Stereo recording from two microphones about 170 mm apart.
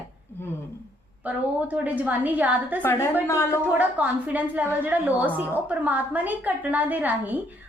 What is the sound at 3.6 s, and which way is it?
A woman's voice, 10° right (ahead or behind).